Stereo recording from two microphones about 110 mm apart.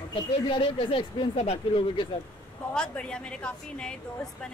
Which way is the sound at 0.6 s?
50° left (ahead or behind).